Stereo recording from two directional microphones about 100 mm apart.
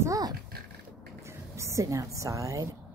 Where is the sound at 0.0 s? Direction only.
35° right (ahead or behind).